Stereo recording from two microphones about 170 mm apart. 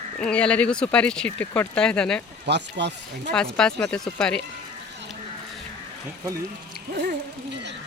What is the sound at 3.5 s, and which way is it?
Speech, 5° left (ahead or behind).